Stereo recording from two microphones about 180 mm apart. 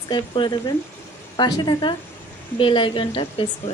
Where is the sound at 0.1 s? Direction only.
25° left (ahead or behind).